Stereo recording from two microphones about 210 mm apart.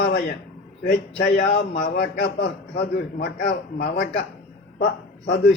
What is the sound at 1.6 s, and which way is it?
A man's voice, 40° left (ahead or behind).